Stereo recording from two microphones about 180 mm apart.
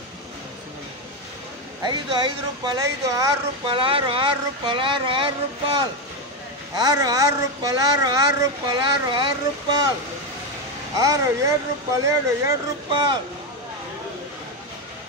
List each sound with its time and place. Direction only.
1.8 s a woman's voice: 25° right (ahead or behind)
6.8 s a woman's voice: 20° right (ahead or behind)
11.0 s a child's voice: 20° right (ahead or behind)